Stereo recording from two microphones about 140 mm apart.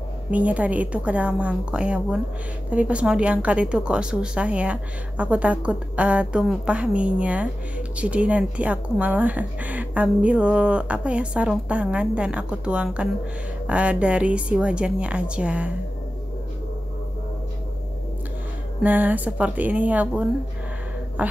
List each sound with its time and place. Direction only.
0.3 s a woman's voice: 10° right (ahead or behind)
18.8 s a woman's voice: 10° right (ahead or behind)
21.2 s a woman's voice: 10° right (ahead or behind)